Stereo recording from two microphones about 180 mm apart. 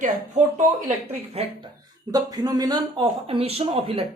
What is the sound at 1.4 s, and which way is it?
Speech, 35° right (ahead or behind).